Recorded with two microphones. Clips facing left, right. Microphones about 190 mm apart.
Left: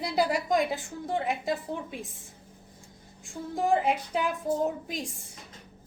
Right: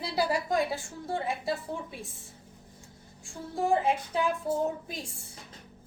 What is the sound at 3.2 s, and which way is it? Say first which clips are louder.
Speech: left 1 dB; 15° left (ahead or behind).